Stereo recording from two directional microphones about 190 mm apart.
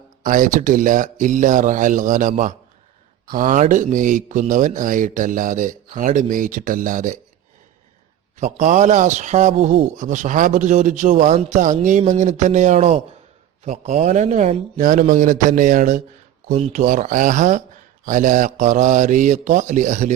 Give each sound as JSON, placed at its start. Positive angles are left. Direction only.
{"t": 0.2, "sound": "speech", "side_deg": -45}
{"t": 8.4, "sound": "a man's voice", "side_deg": -40}